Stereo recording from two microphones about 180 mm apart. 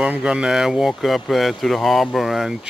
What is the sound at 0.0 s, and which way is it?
Speech, 5° right (ahead or behind).